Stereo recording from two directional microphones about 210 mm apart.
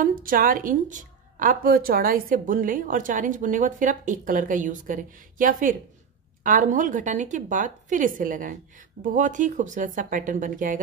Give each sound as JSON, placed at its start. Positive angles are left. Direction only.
{"t": 0.0, "sound": "a woman's voice", "side_deg": -40}